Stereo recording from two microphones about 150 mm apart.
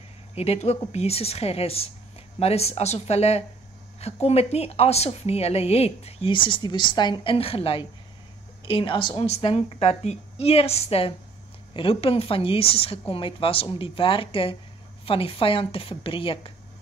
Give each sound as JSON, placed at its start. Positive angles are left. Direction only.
{"t": 0.3, "sound": "a woman's voice", "side_deg": 45}